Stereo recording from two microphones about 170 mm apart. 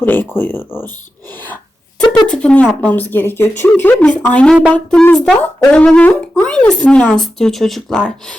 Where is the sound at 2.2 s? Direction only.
5° left (ahead or behind).